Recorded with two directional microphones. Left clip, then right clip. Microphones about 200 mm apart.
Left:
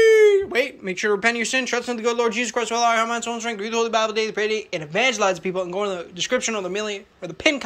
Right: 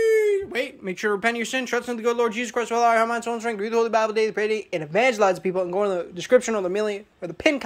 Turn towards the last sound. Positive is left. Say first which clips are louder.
# left 1 dB
turn(degrees=-25)  # may be behind; listen again after turning